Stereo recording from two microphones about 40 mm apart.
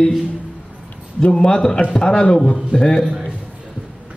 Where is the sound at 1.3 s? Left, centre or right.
Centre.